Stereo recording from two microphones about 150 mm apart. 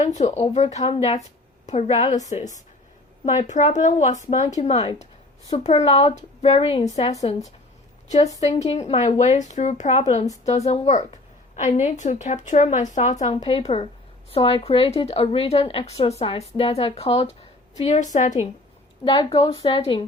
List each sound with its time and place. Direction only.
0.0 s a woman's voice: 50° left (ahead or behind)
3.2 s a woman's voice: 55° left (ahead or behind)
8.4 s a woman's voice: 45° left (ahead or behind)
19.0 s a woman's voice: 30° left (ahead or behind)